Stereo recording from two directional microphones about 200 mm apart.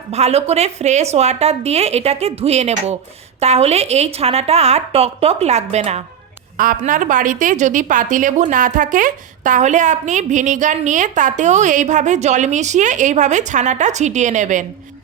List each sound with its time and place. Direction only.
0.1 s a woman's voice: 30° right (ahead or behind)
6.6 s a woman's voice: 40° right (ahead or behind)